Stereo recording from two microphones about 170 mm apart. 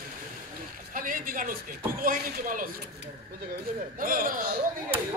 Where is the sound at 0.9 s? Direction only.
55° right (ahead or behind).